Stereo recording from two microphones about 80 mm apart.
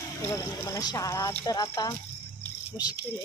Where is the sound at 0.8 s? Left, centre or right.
Left.